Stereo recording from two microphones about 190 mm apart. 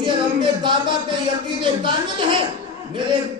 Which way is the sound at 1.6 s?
25° right (ahead or behind).